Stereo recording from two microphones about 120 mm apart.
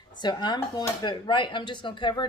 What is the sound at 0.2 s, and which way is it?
A woman's voice, 35° left (ahead or behind).